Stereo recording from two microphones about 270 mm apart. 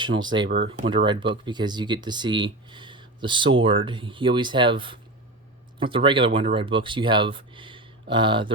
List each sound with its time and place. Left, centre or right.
0.0 s speech: centre